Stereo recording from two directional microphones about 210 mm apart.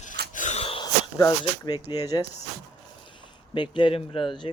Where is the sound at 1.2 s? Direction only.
15° left (ahead or behind).